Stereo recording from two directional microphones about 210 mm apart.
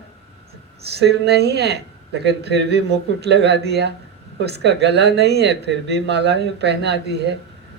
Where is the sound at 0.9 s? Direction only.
50° right (ahead or behind).